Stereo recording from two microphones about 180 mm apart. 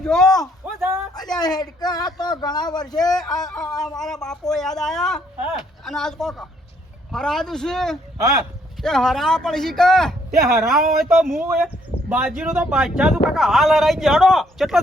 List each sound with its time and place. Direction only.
0.0 s speech: 5° left (ahead or behind)
0.8 s a sound: 15° right (ahead or behind)
1.1 s speech: 20° left (ahead or behind)
3.2 s speech: centre (ahead or behind)
11.4 s speech: 10° right (ahead or behind)